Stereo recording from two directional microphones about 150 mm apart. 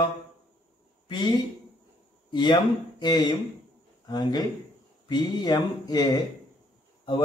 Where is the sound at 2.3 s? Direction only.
30° left (ahead or behind).